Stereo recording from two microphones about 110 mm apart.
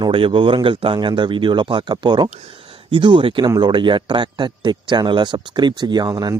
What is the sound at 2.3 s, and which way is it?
Speech, 80° right.